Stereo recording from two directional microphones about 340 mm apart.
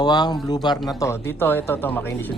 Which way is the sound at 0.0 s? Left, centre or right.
Centre.